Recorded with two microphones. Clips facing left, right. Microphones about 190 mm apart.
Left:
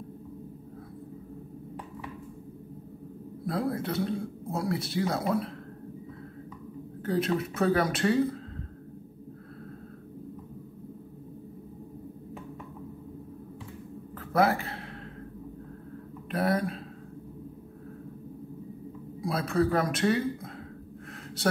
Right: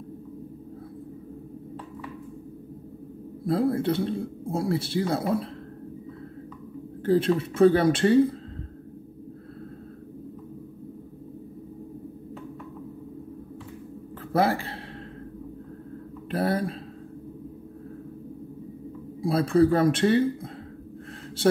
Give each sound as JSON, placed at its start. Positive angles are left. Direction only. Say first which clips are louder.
{"t": 3.4, "sound": "speech", "louder": "right 7 dB", "side_deg": -30}
{"t": 7.1, "sound": "speech", "louder": "right 6 dB", "side_deg": -30}
{"t": 14.3, "sound": "speech", "louder": "right 1 dB", "side_deg": -30}
{"t": 16.3, "sound": "speech", "louder": "right 2 dB", "side_deg": -30}
{"t": 19.2, "sound": "speech", "louder": "right 7 dB", "side_deg": -30}